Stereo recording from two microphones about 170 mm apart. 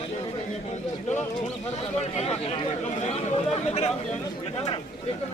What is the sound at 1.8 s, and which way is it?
Speech, 40° left (ahead or behind).